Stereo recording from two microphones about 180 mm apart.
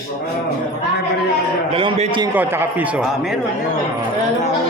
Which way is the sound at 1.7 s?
30° right (ahead or behind).